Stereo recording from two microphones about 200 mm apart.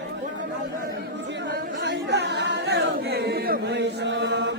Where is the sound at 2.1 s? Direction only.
60° right (ahead or behind).